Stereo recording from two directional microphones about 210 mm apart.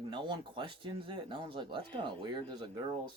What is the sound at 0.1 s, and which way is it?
Speech, 20° right (ahead or behind).